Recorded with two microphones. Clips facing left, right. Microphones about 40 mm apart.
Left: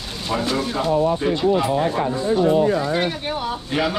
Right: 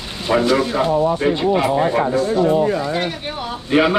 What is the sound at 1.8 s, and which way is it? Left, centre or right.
Speech, right.